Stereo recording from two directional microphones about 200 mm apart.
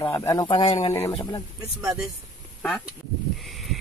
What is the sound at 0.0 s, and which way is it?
Speech, 15° left (ahead or behind).